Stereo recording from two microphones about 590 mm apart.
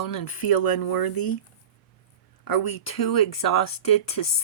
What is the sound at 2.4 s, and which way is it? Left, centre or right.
Speech, left.